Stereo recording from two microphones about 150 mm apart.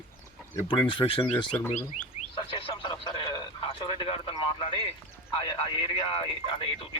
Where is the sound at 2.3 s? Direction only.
35° left (ahead or behind).